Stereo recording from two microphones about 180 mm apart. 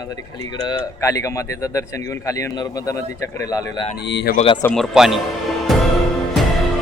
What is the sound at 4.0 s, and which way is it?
Speech, 70° left (ahead or behind).